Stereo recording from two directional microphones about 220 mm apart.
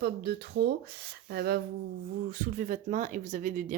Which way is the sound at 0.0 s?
45° right (ahead or behind).